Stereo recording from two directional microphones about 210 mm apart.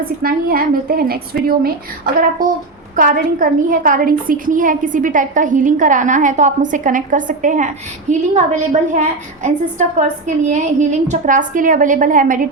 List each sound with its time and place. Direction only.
0.2 s a woman's voice: 45° right (ahead or behind)